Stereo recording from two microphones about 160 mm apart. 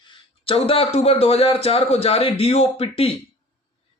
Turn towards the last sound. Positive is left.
turn(degrees=40)  # may be behind; listen again after turning